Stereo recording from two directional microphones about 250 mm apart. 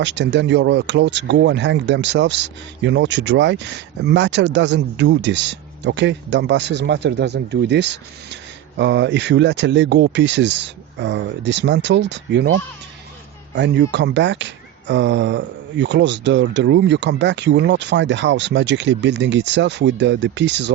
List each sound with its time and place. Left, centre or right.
0.0 s speech: right